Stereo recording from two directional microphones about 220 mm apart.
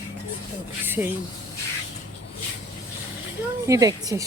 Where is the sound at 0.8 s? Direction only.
10° right (ahead or behind).